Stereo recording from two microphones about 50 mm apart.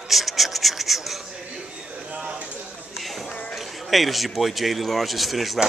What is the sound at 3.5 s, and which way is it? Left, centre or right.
A man's voice, centre.